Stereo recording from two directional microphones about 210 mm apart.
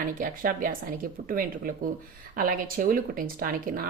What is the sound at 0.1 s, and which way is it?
Speech, 40° right (ahead or behind).